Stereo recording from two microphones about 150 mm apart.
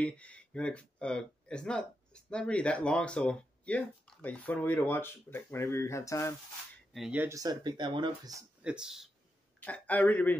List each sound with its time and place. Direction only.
0.0 s speech: 10° left (ahead or behind)
6.9 s speech: centre (ahead or behind)
7.2 s speech: 20° right (ahead or behind)
8.6 s speech: 5° right (ahead or behind)
9.6 s speech: 10° left (ahead or behind)